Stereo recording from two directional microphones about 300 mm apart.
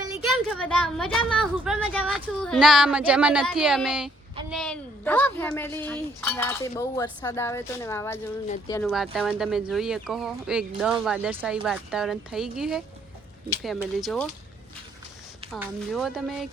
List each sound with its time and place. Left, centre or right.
0.4 s a woman's voice: centre
8.8 s a woman's voice: centre
15.5 s a woman's voice: centre